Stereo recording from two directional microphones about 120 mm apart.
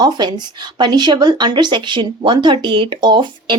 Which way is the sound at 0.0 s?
40° right (ahead or behind).